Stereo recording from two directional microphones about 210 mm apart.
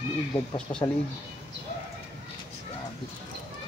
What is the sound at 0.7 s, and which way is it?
Speech, 35° left (ahead or behind).